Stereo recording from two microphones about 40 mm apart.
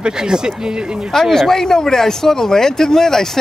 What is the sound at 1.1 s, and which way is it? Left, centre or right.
Speech, centre.